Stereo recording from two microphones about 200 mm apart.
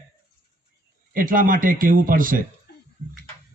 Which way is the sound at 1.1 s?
45° right (ahead or behind).